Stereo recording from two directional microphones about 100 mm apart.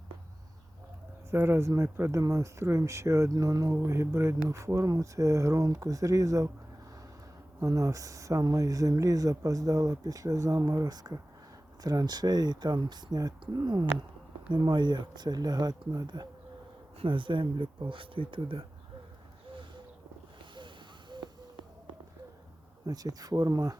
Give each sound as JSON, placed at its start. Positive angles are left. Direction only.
{"t": 1.3, "sound": "speech", "side_deg": -25}
{"t": 7.6, "sound": "speech", "side_deg": -35}
{"t": 17.0, "sound": "speech", "side_deg": -55}
{"t": 21.1, "sound": "a sound", "side_deg": -50}
{"t": 22.9, "sound": "speech", "side_deg": -40}